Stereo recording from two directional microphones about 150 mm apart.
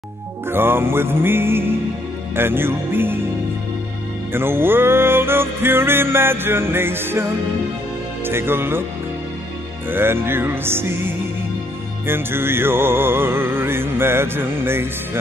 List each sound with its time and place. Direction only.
0.5 s music: 15° right (ahead or behind)
4.3 s music: 15° right (ahead or behind)
9.8 s music: 15° right (ahead or behind)